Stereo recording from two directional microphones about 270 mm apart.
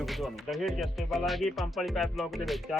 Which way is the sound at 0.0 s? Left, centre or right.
Centre.